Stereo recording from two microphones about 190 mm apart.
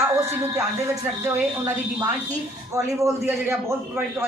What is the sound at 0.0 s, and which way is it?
Speech, 15° right (ahead or behind).